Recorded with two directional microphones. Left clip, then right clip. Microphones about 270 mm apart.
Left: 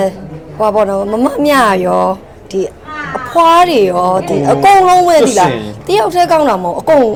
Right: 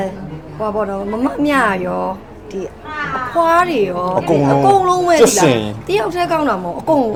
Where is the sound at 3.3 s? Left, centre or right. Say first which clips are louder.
Left 7 dB; left.